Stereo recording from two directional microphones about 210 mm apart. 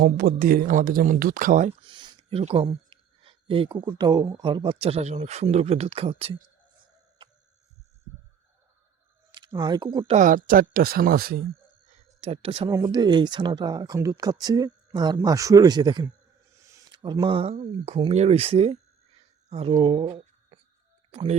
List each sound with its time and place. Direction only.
0.0 s speech: 45° right (ahead or behind)
1.8 s speech: 25° right (ahead or behind)
9.3 s speech: 20° right (ahead or behind); by 11.4 s 45° right (ahead or behind)
12.0 s speech: 30° right (ahead or behind)